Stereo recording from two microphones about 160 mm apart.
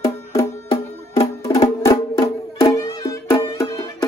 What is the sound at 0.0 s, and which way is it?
Music, 20° left (ahead or behind).